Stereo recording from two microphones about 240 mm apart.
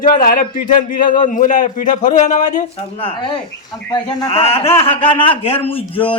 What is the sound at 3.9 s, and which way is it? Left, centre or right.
A man's voice, left.